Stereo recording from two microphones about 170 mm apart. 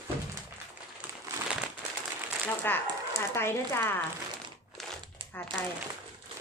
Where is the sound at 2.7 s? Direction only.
10° left (ahead or behind).